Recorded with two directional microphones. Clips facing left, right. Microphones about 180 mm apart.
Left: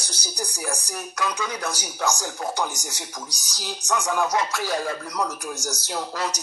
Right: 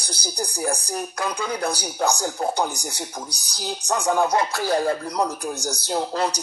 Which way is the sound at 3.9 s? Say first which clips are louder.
Right 3 dB; 35° right (ahead or behind).